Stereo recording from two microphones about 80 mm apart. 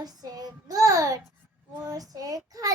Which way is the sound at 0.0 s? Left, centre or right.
Right.